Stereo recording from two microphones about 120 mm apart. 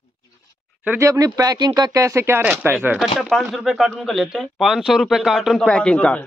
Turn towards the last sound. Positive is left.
turn(degrees=10)  # may be behind; listen again after turning